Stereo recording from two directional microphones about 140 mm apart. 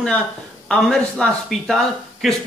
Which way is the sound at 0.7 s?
5° left (ahead or behind).